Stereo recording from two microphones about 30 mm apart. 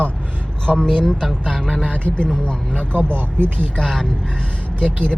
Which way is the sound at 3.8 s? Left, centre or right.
Centre.